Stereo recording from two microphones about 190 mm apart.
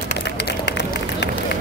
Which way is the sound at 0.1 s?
60° left (ahead or behind).